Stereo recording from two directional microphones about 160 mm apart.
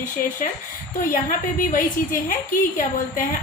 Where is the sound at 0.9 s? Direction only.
60° left (ahead or behind).